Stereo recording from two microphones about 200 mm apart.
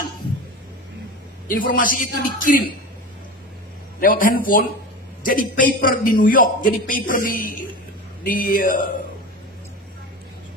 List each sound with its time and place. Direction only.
1.7 s a man's voice: 40° left (ahead or behind)
4.0 s a man's voice: 45° left (ahead or behind)